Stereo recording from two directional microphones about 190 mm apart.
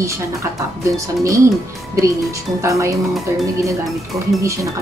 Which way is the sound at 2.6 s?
15° right (ahead or behind).